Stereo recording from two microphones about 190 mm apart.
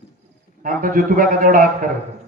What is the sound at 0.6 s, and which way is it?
A man's voice, 45° right (ahead or behind).